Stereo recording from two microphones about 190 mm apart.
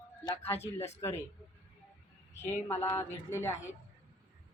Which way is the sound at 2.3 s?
15° left (ahead or behind).